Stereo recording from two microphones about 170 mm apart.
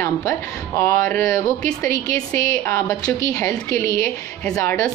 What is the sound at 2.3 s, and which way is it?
A woman's voice, 15° left (ahead or behind).